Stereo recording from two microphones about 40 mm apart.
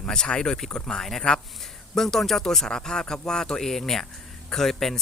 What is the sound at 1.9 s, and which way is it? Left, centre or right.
Speech, centre.